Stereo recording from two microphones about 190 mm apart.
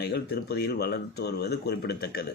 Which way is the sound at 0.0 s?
55° left (ahead or behind).